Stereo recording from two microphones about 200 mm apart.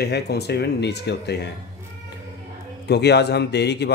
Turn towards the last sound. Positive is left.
turn(degrees=55)  # may be behind; listen again after turning